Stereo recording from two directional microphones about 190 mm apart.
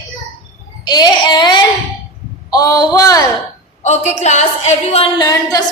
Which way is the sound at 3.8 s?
35° left (ahead or behind).